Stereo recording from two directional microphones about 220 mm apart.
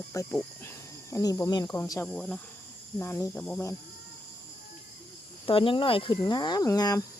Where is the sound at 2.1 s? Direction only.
Centre (ahead or behind).